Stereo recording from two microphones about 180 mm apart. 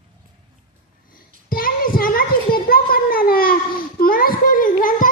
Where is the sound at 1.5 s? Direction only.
50° left (ahead or behind).